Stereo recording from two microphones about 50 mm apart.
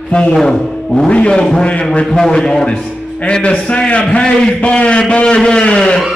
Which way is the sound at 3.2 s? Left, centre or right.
Left.